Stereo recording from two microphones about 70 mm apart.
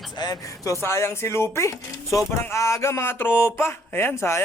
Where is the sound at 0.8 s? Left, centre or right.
Left.